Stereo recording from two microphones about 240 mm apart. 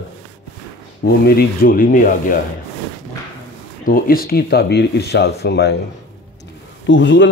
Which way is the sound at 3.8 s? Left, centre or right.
Left.